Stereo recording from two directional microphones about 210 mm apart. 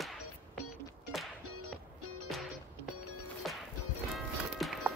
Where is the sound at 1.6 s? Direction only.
90° right.